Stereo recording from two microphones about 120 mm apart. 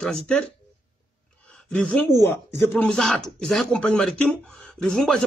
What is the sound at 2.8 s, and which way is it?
Speech, 5° left (ahead or behind).